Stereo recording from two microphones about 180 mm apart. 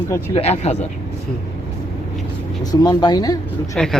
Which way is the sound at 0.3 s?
35° left (ahead or behind).